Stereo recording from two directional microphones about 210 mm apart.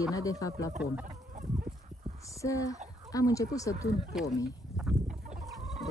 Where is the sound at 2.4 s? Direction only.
15° left (ahead or behind).